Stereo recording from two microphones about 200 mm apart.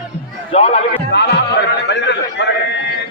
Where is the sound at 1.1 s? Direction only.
60° left (ahead or behind).